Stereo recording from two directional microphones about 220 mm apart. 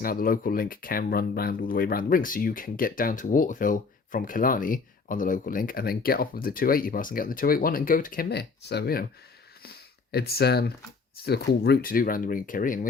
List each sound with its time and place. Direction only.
0.0 s speech: 40° left (ahead or behind)